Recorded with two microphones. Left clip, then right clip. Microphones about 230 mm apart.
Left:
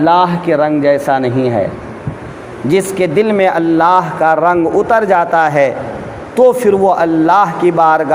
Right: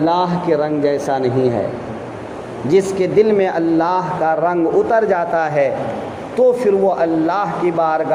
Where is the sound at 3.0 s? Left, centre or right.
Left.